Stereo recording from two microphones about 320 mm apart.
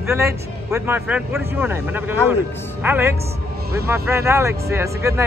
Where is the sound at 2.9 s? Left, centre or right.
Centre.